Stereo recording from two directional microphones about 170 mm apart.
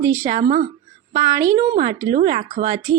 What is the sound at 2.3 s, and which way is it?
Speech, 40° right (ahead or behind).